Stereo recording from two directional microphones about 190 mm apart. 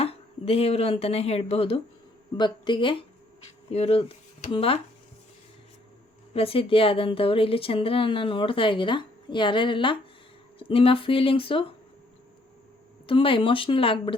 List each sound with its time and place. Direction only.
0.0 s a woman's voice: 30° left (ahead or behind)
6.3 s a woman's voice: 30° left (ahead or behind)
13.1 s a woman's voice: 30° left (ahead or behind)